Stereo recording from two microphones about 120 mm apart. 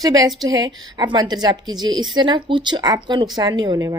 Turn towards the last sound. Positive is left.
turn(degrees=-35)  # may be behind; listen again after turning